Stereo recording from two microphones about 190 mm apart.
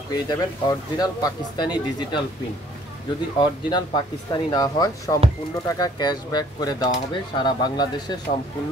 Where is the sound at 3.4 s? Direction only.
20° left (ahead or behind).